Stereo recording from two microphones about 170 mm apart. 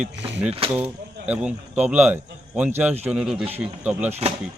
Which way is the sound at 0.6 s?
35° right (ahead or behind).